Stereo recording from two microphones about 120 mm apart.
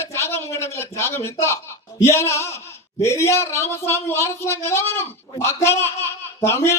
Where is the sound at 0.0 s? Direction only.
20° left (ahead or behind).